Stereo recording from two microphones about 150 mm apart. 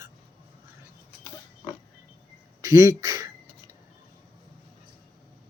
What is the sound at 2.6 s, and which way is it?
Speech, 25° right (ahead or behind).